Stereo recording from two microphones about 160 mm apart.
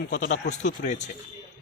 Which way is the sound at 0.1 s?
50° left (ahead or behind).